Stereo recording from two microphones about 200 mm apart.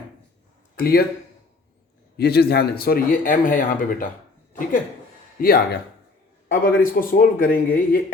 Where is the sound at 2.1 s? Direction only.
55° left (ahead or behind).